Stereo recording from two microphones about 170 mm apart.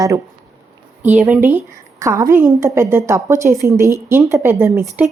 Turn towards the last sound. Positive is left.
turn(degrees=-10)  # may be behind; listen again after turning